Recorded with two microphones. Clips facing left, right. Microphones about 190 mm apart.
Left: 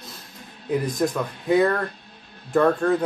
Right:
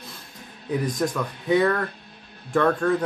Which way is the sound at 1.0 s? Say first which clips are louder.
Left 2 dB; 10° left (ahead or behind).